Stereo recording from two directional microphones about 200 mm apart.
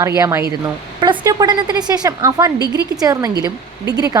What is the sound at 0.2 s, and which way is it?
A woman's voice, 15° right (ahead or behind).